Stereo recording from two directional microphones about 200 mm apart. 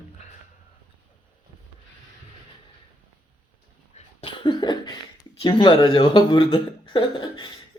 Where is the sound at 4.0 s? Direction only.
25° left (ahead or behind).